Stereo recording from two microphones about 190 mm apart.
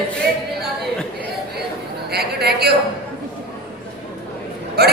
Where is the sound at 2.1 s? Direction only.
55° right (ahead or behind).